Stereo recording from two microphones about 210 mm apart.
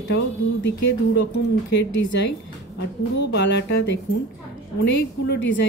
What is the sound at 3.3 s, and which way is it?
Speech, 55° left (ahead or behind).